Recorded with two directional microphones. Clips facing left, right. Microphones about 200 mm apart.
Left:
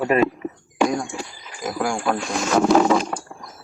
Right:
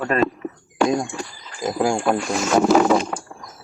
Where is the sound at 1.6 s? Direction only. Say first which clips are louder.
Right 4 dB; 25° right (ahead or behind).